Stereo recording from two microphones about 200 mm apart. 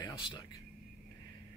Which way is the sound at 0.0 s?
20° left (ahead or behind).